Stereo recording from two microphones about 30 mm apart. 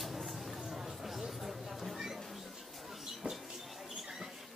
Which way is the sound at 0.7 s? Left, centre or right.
Centre.